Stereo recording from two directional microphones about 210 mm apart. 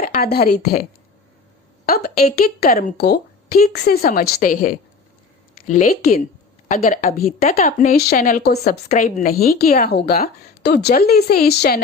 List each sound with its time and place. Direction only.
0.0 s a woman's voice: 45° left (ahead or behind)
1.9 s a woman's voice: 50° left (ahead or behind)